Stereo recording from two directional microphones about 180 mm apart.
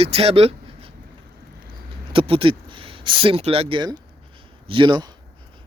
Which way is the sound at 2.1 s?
30° right (ahead or behind).